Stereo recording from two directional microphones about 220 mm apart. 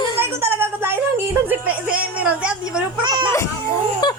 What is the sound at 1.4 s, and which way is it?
Speech, 5° right (ahead or behind).